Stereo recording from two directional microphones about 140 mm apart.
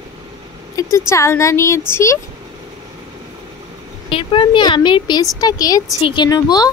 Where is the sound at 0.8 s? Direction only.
25° left (ahead or behind).